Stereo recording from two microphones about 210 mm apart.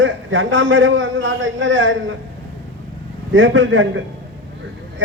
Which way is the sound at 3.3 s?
65° right (ahead or behind).